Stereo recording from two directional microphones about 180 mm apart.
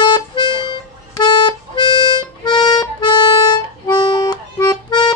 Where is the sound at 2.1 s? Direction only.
25° left (ahead or behind).